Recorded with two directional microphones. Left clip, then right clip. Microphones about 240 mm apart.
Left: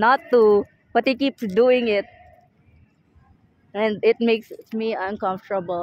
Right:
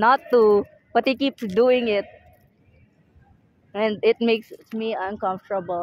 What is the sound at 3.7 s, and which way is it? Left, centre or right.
A woman's voice, centre.